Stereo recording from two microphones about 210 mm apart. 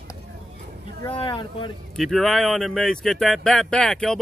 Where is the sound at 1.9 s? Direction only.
Centre (ahead or behind).